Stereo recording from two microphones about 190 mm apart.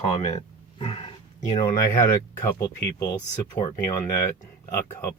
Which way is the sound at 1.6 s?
15° left (ahead or behind).